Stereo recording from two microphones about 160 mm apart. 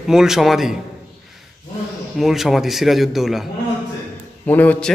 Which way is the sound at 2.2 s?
Centre (ahead or behind).